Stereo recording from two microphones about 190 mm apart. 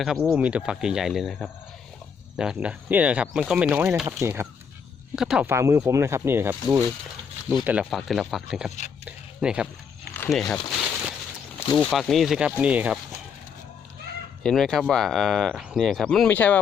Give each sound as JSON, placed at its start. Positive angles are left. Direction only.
{"t": 0.0, "sound": "speech", "side_deg": -5}
{"t": 9.0, "sound": "a sound", "side_deg": -5}
{"t": 10.2, "sound": "speech", "side_deg": 0}
{"t": 11.6, "sound": "speech", "side_deg": 25}
{"t": 11.9, "sound": "speech", "side_deg": 0}
{"t": 14.4, "sound": "speech", "side_deg": 0}